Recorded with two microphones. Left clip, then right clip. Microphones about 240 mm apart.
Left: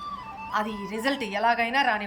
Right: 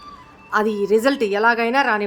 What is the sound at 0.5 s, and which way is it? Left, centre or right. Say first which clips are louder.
A woman's voice: right 12 dB; centre.